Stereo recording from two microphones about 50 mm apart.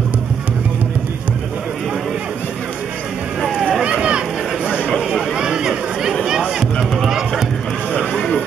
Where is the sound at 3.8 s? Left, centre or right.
Centre.